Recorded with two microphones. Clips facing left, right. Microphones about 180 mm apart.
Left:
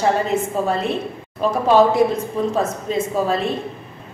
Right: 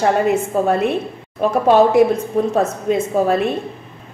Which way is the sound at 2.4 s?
55° right (ahead or behind).